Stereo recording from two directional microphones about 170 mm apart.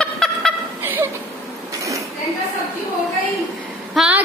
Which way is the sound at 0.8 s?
10° right (ahead or behind).